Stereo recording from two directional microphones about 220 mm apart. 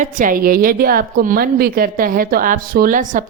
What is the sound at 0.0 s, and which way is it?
A woman's voice, 40° right (ahead or behind).